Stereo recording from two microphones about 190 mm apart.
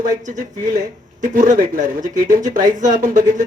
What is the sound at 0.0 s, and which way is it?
Speech, 45° right (ahead or behind).